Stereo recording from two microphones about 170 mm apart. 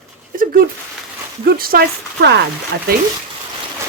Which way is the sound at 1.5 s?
60° right (ahead or behind).